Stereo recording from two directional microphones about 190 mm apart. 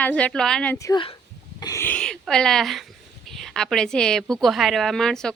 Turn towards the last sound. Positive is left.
turn(degrees=5)  # may be behind; listen again after turning